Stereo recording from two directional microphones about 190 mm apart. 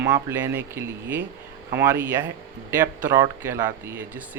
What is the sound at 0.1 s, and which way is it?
Speech, 10° right (ahead or behind).